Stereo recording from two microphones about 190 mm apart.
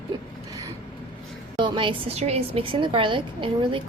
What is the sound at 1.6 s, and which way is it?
A woman's voice, 25° right (ahead or behind).